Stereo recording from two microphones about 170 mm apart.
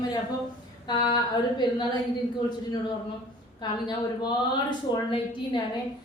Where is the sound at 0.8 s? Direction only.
30° left (ahead or behind).